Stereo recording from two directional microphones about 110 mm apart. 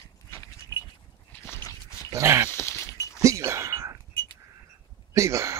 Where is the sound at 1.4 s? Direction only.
25° left (ahead or behind).